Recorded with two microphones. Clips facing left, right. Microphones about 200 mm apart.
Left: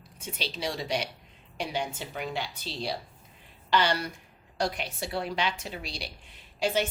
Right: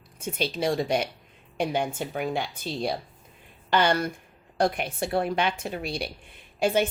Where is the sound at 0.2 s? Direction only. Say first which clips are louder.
Right 7 dB; 50° right (ahead or behind).